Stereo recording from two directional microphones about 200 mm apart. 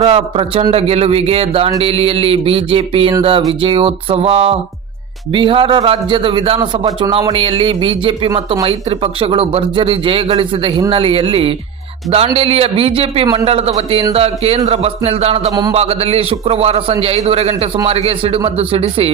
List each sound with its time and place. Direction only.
0.0 s a man's voice: 30° right (ahead or behind)